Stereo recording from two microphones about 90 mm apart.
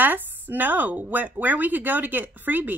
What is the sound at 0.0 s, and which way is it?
Speech, 20° right (ahead or behind).